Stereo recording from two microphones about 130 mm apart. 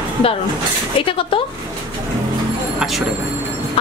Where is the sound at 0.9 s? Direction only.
45° left (ahead or behind).